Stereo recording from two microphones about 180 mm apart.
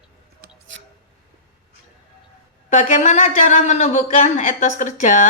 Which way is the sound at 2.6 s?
40° left (ahead or behind).